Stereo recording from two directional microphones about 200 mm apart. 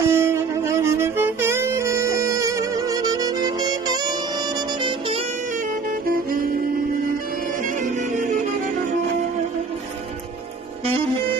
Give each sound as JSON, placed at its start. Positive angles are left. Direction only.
{"t": 0.0, "sound": "music", "side_deg": -10}
{"t": 6.0, "sound": "music", "side_deg": -45}